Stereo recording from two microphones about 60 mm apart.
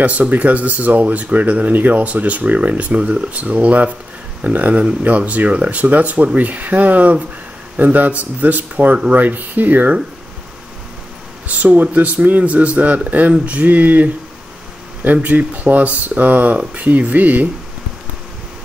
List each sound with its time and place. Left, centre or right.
0.0 s speech: right
11.4 s speech: right
15.2 s speech: right